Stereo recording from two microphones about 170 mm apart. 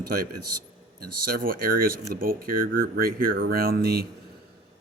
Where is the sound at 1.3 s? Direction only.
55° right (ahead or behind).